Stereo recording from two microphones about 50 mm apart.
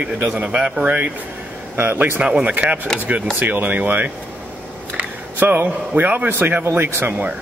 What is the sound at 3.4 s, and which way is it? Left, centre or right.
Speech, right.